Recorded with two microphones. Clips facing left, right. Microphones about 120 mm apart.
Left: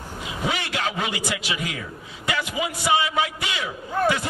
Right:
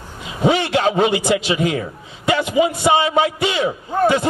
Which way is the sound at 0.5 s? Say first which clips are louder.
Right 12 dB; 30° right (ahead or behind).